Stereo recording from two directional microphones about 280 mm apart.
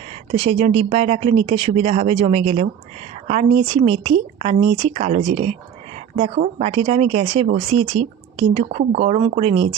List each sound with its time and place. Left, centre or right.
0.3 s speech: right